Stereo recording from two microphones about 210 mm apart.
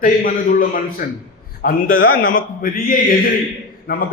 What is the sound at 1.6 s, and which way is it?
A man's voice, 45° left (ahead or behind).